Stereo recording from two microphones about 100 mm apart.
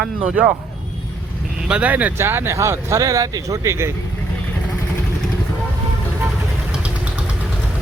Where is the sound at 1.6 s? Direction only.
15° right (ahead or behind).